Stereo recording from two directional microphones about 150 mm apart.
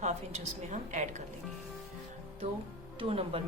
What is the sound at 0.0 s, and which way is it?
A woman's voice, 50° right (ahead or behind).